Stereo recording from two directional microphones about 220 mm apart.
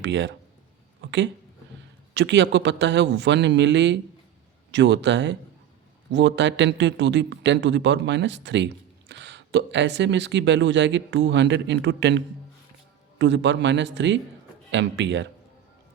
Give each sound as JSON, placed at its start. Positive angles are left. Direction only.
{"t": 0.0, "sound": "a man's voice", "side_deg": -55}